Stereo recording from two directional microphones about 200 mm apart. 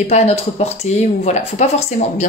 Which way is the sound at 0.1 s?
35° left (ahead or behind).